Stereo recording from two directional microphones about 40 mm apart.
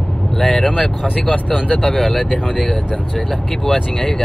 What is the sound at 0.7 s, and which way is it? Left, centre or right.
Speech, centre.